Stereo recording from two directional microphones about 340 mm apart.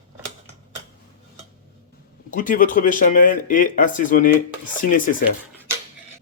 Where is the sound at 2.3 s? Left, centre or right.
Left.